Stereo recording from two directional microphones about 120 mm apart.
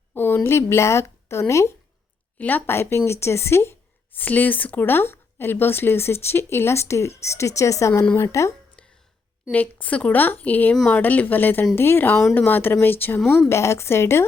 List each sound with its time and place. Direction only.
0.1 s a woman's voice: 15° left (ahead or behind)
8.8 s a sound: 10° left (ahead or behind)
9.5 s a woman's voice: 10° left (ahead or behind)